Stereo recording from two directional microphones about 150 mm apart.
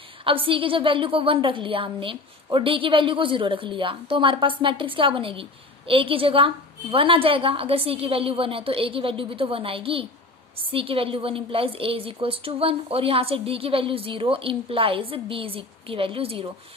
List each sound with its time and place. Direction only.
0.3 s a woman's voice: 35° right (ahead or behind)